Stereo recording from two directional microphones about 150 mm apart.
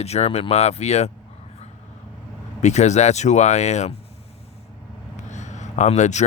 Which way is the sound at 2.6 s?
50° left (ahead or behind).